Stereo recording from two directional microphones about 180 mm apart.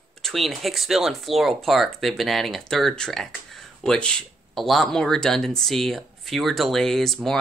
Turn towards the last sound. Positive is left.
turn(degrees=0)  # may be behind; listen again after turning